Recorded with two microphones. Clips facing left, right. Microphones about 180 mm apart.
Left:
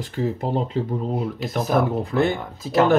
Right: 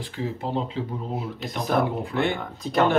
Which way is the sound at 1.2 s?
Centre (ahead or behind).